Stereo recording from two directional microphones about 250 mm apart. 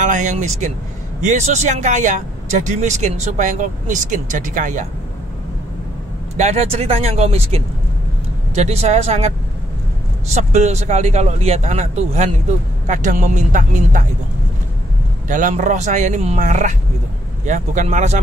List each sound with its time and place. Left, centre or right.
0.0 s speech: right
6.3 s speech: right
10.3 s speech: right
15.2 s speech: right